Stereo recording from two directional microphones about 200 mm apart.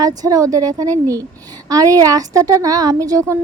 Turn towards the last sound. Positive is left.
turn(degrees=-15)  # may be behind; listen again after turning